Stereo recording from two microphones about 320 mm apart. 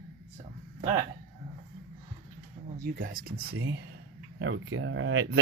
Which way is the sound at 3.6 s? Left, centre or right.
Right.